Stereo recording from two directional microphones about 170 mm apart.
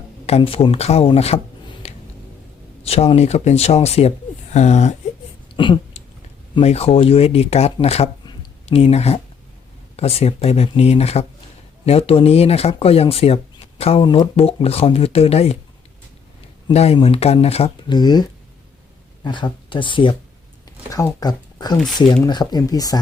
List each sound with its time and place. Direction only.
0.3 s speech: 35° left (ahead or behind)
5.5 s a sound: 30° left (ahead or behind)
6.5 s speech: 35° left (ahead or behind)
16.7 s speech: 35° left (ahead or behind); by 23.0 s 20° left (ahead or behind)